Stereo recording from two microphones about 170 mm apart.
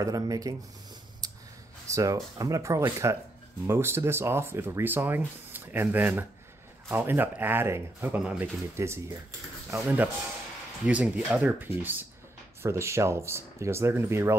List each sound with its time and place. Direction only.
0.0 s speech: 20° right (ahead or behind)
1.9 s speech: 20° right (ahead or behind)